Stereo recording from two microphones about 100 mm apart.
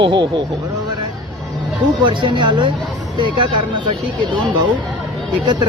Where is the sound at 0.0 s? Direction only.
55° right (ahead or behind).